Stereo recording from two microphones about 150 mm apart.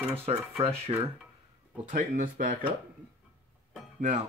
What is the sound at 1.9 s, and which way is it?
Speech, 60° right (ahead or behind).